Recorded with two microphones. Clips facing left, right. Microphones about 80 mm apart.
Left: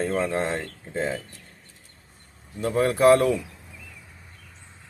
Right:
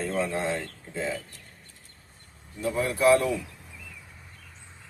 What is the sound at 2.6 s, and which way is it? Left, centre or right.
Speech, left.